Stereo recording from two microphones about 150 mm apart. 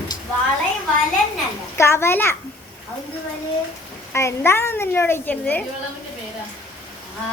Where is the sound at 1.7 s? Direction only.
15° left (ahead or behind).